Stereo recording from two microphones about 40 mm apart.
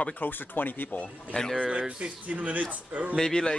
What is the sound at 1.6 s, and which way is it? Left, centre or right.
Speech, right.